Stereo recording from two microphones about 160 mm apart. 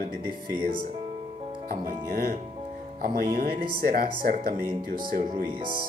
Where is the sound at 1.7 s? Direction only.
65° right (ahead or behind).